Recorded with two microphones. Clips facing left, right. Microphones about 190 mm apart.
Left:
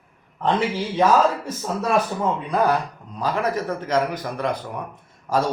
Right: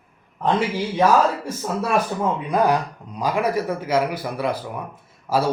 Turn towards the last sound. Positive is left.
turn(degrees=-5)  # may be behind; listen again after turning